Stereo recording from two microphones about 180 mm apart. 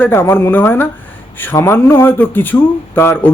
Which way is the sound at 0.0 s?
10° left (ahead or behind).